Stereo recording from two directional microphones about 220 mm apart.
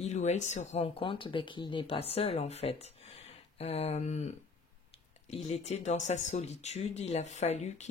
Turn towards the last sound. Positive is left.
turn(degrees=30)  # may be behind; listen again after turning